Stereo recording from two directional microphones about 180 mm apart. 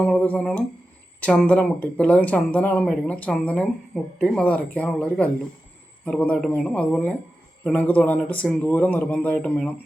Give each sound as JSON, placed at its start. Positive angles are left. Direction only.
{"t": 0.0, "sound": "speech", "side_deg": 5}